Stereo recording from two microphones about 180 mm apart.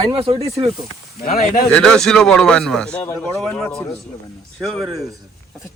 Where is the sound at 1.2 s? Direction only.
55° left (ahead or behind).